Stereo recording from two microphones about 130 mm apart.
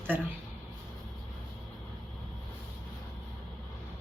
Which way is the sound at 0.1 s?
15° right (ahead or behind).